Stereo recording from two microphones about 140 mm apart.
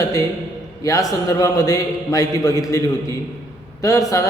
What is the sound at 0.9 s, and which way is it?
A man's voice, 25° left (ahead or behind).